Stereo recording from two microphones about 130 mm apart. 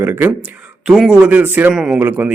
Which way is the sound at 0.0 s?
15° right (ahead or behind).